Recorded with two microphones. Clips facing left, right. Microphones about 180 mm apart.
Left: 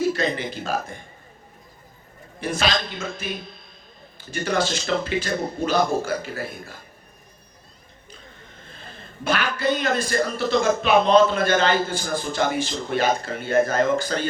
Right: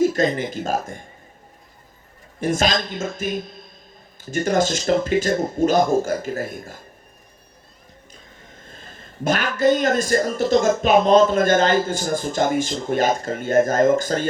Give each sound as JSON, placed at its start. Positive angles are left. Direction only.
{"t": 0.0, "sound": "a man's voice", "side_deg": -45}
{"t": 2.4, "sound": "a man's voice", "side_deg": -45}
{"t": 8.1, "sound": "a man's voice", "side_deg": -45}